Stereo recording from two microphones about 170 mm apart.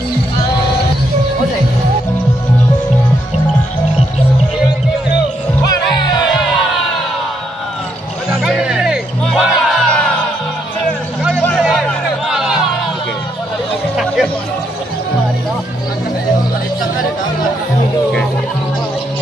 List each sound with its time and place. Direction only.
5.6 s music: 25° left (ahead or behind)
8.3 s music: 5° right (ahead or behind)
11.5 s music: 5° right (ahead or behind)
13.9 s music: centre (ahead or behind)